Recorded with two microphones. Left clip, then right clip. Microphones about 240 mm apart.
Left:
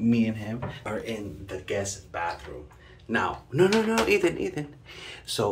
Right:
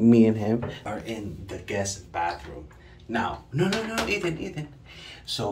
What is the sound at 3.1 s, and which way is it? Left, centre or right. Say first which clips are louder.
Speech: left 1 dB; centre.